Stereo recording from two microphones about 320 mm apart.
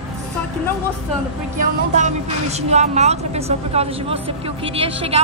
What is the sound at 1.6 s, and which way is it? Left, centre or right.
A woman's voice, right.